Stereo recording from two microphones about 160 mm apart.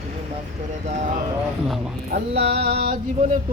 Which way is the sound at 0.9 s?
50° right (ahead or behind).